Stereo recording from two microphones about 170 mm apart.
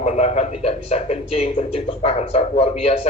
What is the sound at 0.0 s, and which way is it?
A man's voice, 40° left (ahead or behind).